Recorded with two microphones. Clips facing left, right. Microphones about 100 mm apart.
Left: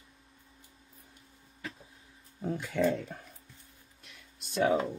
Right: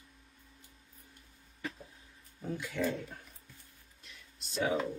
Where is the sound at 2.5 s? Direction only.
55° left (ahead or behind).